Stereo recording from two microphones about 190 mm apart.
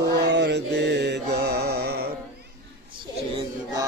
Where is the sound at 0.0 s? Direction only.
60° right (ahead or behind).